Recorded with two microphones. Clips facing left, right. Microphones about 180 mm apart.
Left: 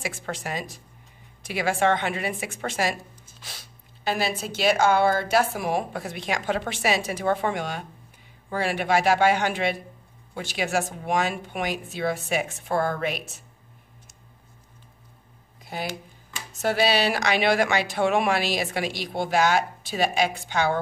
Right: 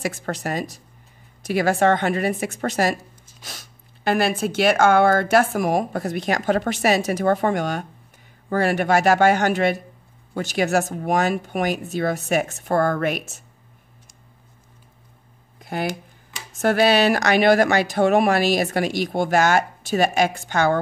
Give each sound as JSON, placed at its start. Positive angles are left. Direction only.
{"t": 0.0, "sound": "speech", "side_deg": -40}
{"t": 15.6, "sound": "speech", "side_deg": -55}